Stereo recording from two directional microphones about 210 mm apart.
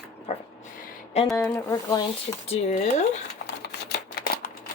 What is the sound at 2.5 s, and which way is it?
Speech, 30° left (ahead or behind).